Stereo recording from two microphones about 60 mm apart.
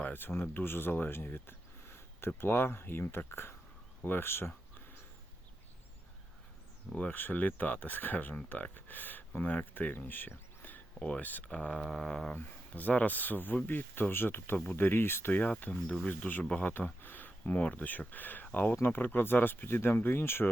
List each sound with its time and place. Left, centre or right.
0.0 s speech: left
6.9 s speech: left
11.5 s a sound: centre
12.3 s speech: left
15.4 s speech: left
16.6 s speech: left